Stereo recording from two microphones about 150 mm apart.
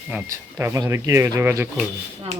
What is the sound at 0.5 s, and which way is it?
Speech, 20° right (ahead or behind).